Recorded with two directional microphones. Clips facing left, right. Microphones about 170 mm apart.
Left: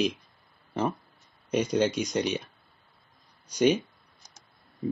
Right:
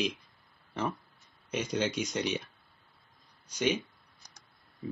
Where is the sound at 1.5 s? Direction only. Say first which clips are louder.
Left 6 dB; 40° left (ahead or behind).